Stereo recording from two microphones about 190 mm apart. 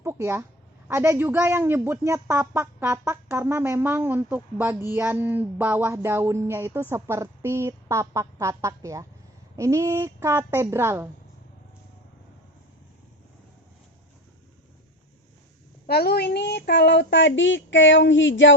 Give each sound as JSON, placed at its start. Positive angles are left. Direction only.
{"t": 0.0, "sound": "a sound", "side_deg": -15}
{"t": 0.9, "sound": "a woman's voice", "side_deg": -15}
{"t": 15.9, "sound": "a woman's voice", "side_deg": 55}